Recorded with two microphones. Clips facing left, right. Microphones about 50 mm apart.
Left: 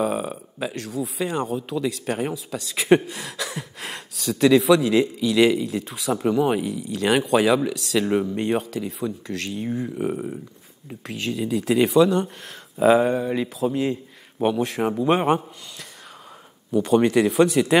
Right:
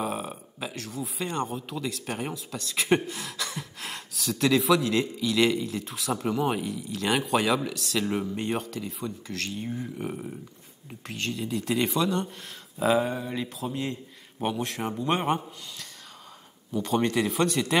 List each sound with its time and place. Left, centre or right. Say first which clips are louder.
0.0 s speech: left 7 dB; centre
8.0 s speech: left 7 dB; left
8.4 s a man's voice: left 6 dB; centre